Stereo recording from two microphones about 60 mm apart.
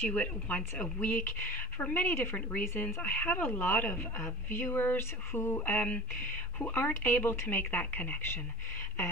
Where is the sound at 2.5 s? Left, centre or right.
Left.